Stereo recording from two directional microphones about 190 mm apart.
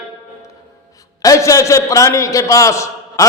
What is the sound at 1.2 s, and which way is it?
A man's voice, 15° left (ahead or behind).